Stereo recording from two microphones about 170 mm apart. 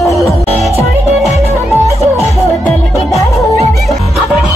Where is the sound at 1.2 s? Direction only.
Centre (ahead or behind).